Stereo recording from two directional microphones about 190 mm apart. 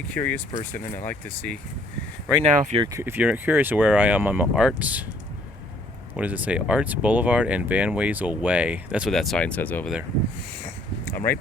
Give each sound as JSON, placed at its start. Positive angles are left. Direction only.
{"t": 0.1, "sound": "speech", "side_deg": 10}
{"t": 2.4, "sound": "speech", "side_deg": -35}
{"t": 2.8, "sound": "speech", "side_deg": -15}
{"t": 6.1, "sound": "speech", "side_deg": -10}
{"t": 10.6, "sound": "a sound", "side_deg": 10}